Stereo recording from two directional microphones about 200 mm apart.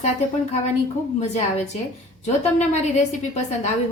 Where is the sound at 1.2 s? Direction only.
35° left (ahead or behind).